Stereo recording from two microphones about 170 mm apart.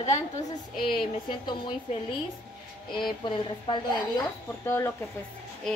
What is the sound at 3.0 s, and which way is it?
Speech, 25° left (ahead or behind).